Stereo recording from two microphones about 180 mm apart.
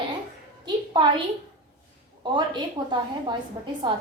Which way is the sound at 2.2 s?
25° right (ahead or behind).